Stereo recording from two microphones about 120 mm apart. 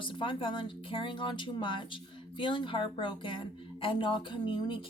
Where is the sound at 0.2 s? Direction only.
45° left (ahead or behind).